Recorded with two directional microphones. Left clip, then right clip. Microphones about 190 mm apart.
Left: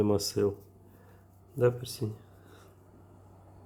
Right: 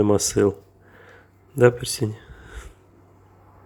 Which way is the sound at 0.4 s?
20° right (ahead or behind).